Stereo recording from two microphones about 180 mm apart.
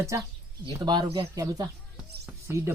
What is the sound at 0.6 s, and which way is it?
Speech, 25° right (ahead or behind).